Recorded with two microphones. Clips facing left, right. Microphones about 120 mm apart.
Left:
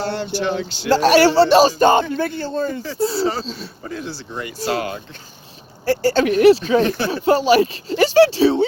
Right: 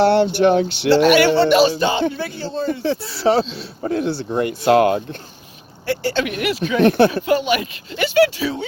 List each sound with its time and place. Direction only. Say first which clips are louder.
0.0 s speech: right 9 dB; 65° right (ahead or behind)
0.9 s a man's voice: even; 35° left (ahead or behind); by 2.6 s 55° left (ahead or behind)
3.0 s speech: left 14 dB; 25° left (ahead or behind)
3.8 s speech: right 10 dB; 60° right (ahead or behind)
5.8 s speech: left 4 dB; 40° left (ahead or behind)
6.7 s speech: right 4 dB; 60° right (ahead or behind)
7.1 s speech: left 3 dB; 35° left (ahead or behind)